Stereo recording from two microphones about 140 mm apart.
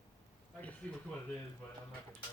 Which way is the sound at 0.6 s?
10° left (ahead or behind).